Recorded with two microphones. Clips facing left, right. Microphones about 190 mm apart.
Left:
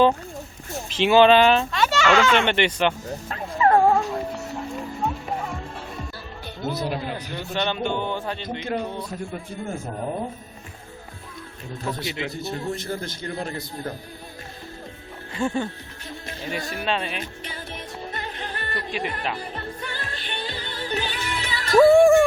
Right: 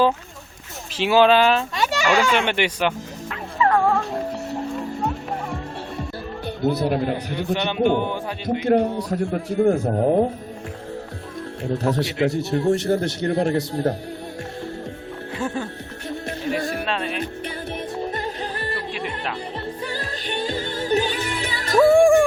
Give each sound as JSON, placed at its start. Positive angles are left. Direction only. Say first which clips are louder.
{"t": 0.9, "sound": "speech", "louder": "left 1 dB", "side_deg": -5}
{"t": 3.2, "sound": "music", "louder": "left 1 dB", "side_deg": 35}
{"t": 6.6, "sound": "speech", "louder": "right 6 dB", "side_deg": -60}
{"t": 7.3, "sound": "speech", "louder": "right 2 dB", "side_deg": -15}
{"t": 8.6, "sound": "a man's voice", "louder": "right 10 dB", "side_deg": -60}
{"t": 11.6, "sound": "a man's voice", "louder": "right 8 dB", "side_deg": -75}
{"t": 15.4, "sound": "speech", "louder": "left 2 dB", "side_deg": -5}
{"t": 16.6, "sound": "music", "louder": "right 6 dB", "side_deg": -55}
{"t": 16.8, "sound": "speech", "louder": "right 1 dB", "side_deg": 0}
{"t": 18.1, "sound": "music", "louder": "right 5 dB", "side_deg": -40}
{"t": 18.9, "sound": "speech", "louder": "even", "side_deg": 0}
{"t": 19.8, "sound": "music", "louder": "right 5 dB", "side_deg": -35}
{"t": 21.9, "sound": "music", "louder": "right 2 dB", "side_deg": -15}